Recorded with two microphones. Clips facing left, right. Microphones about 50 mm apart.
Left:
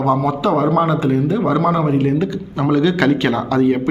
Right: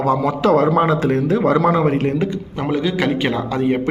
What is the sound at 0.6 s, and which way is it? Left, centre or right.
Speech, right.